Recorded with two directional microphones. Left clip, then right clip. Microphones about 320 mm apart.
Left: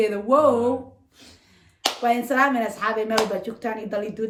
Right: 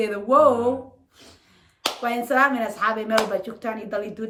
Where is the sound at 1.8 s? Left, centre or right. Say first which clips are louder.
Left 3 dB; centre.